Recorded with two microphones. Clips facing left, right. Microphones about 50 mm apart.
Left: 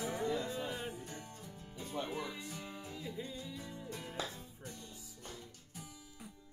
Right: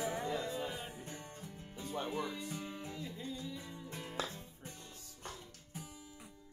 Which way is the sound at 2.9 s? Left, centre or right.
Centre.